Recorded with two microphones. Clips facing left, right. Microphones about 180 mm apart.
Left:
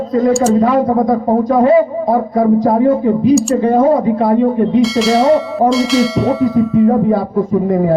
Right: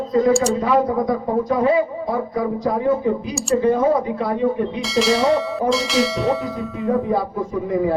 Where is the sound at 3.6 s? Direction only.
60° left (ahead or behind).